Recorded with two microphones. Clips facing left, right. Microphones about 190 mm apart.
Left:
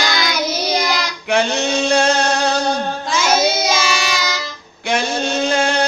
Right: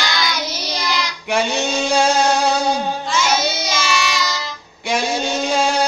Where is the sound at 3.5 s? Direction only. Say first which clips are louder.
Left 3 dB; 50° left (ahead or behind).